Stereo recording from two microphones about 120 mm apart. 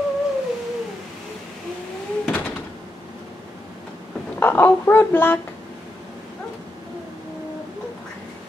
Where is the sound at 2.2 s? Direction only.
15° left (ahead or behind).